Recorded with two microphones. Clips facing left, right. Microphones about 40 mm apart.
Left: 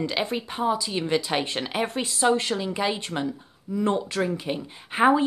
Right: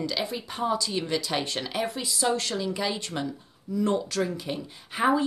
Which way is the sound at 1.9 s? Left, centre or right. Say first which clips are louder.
Left 2 dB; left.